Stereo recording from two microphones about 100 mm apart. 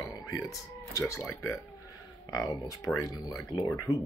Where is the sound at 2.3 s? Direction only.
35° left (ahead or behind).